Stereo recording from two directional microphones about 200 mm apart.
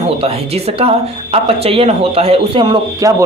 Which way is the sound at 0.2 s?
30° right (ahead or behind).